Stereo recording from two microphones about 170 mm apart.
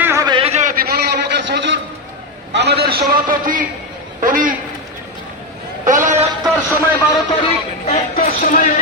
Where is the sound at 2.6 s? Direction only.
75° right (ahead or behind); by 3.7 s 55° right (ahead or behind).